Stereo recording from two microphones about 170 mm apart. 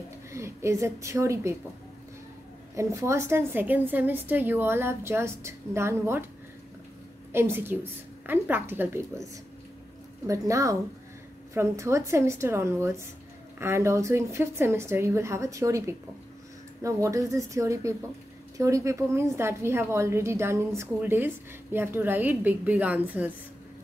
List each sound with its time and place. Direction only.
0.3 s a woman's voice: 15° right (ahead or behind)
2.7 s a woman's voice: 15° right (ahead or behind)
7.3 s a woman's voice: 15° right (ahead or behind)